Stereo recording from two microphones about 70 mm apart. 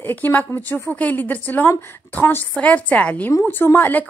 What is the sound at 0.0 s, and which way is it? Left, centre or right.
A woman's voice, left.